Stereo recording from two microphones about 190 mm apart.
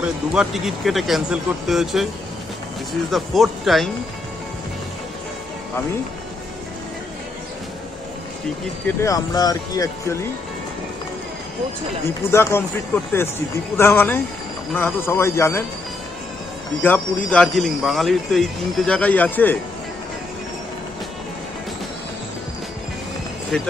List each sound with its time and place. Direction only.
0.0 s speech: 5° right (ahead or behind)
3.1 s speech: centre (ahead or behind)
8.8 s speech: 15° left (ahead or behind)
12.2 s speech: 15° left (ahead or behind)
16.8 s speech: 10° left (ahead or behind)
23.5 s speech: 5° left (ahead or behind)